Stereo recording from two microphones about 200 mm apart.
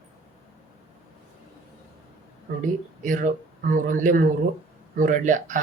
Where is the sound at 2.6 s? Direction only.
40° right (ahead or behind).